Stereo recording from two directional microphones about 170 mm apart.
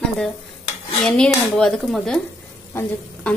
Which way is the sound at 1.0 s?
5° left (ahead or behind).